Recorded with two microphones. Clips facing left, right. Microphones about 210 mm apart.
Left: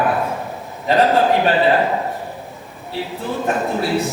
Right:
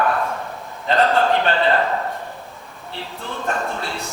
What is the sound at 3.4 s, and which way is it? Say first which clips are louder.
Speech: left 3 dB; 15° left (ahead or behind).